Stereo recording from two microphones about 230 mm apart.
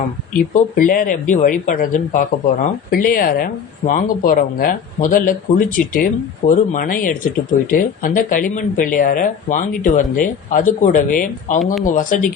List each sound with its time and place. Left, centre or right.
0.3 s speech: left